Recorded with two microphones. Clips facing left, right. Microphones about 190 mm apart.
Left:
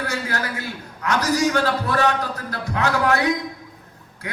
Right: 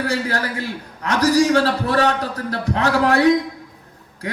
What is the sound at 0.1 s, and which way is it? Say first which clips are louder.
A man's voice: right 4 dB; 35° right (ahead or behind).